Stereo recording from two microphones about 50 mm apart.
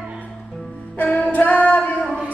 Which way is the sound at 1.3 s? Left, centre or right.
Left.